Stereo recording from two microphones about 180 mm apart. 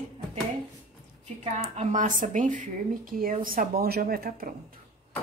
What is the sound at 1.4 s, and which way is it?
Speech, 40° right (ahead or behind).